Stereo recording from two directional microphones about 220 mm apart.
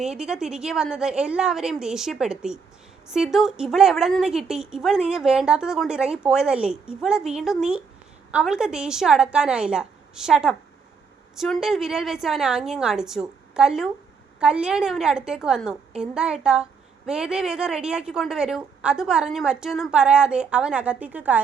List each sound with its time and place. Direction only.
0.0 s a woman's voice: 5° right (ahead or behind)